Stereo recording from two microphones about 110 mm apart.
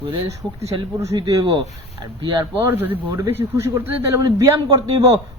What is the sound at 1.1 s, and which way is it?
A man's voice, 35° right (ahead or behind).